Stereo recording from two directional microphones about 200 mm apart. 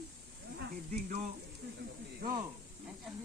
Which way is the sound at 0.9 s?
35° right (ahead or behind).